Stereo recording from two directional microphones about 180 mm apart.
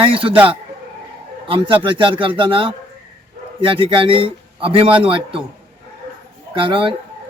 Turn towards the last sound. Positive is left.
turn(degrees=-30)  # may be behind; listen again after turning